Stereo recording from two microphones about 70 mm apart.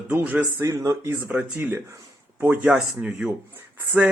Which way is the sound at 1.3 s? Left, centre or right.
Right.